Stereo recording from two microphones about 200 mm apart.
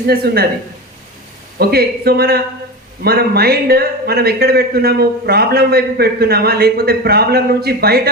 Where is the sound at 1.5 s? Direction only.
50° right (ahead or behind).